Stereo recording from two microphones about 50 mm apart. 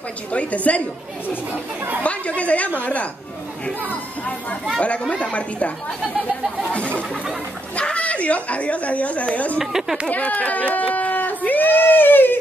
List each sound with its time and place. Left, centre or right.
0.3 s speech: left
2.0 s speech: left
4.7 s speech: left
7.7 s a woman's voice: left
9.6 s speech: centre
10.0 s crowd: left